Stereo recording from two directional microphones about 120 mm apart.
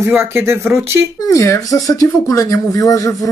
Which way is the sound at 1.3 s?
25° left (ahead or behind).